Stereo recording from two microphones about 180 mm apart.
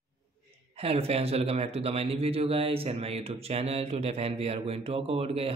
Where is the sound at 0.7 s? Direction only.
35° right (ahead or behind).